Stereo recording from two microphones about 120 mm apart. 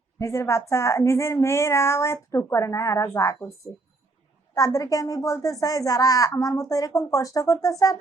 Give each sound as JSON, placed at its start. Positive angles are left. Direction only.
{"t": 0.2, "sound": "a child's voice", "side_deg": 25}
{"t": 4.5, "sound": "a child's voice", "side_deg": 30}